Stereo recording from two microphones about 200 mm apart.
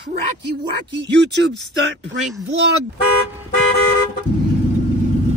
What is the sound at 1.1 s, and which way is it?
Speech, 60° right (ahead or behind).